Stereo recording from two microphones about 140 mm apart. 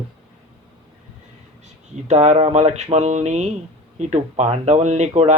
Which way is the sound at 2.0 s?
55° right (ahead or behind).